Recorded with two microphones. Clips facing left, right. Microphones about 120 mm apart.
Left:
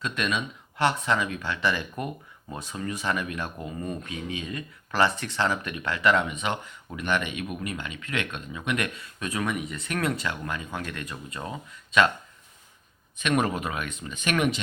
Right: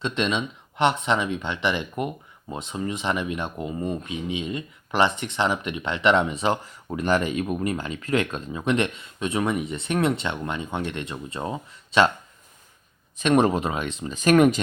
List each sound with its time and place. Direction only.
0.0 s speech: 25° right (ahead or behind)
13.1 s speech: 30° right (ahead or behind)